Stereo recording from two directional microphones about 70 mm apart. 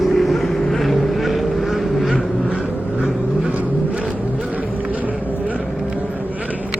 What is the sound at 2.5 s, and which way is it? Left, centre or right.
Vehicle, centre.